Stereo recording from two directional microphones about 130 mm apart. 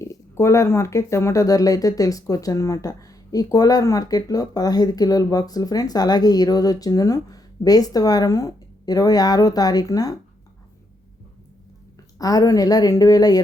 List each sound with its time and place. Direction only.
0.0 s speech: 25° left (ahead or behind)
12.2 s speech: 30° left (ahead or behind)